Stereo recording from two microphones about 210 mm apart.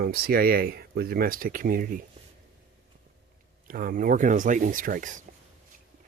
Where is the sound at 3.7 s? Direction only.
40° right (ahead or behind).